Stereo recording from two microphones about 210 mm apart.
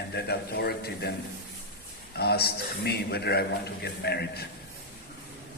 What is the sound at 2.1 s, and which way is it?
A man's voice, 50° left (ahead or behind).